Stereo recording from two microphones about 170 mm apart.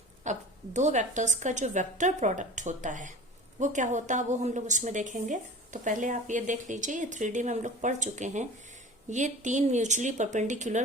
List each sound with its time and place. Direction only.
0.3 s a woman's voice: 45° right (ahead or behind)